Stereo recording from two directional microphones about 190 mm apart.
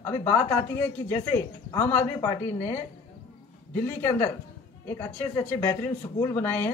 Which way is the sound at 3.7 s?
15° left (ahead or behind).